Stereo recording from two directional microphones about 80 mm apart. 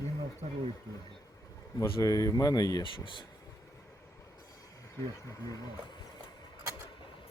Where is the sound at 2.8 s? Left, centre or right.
Left.